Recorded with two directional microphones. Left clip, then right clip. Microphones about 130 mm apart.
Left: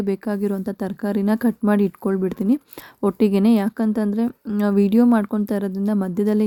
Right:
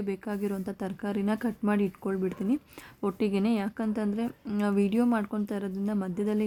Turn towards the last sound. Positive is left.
turn(degrees=55)  # may be behind; listen again after turning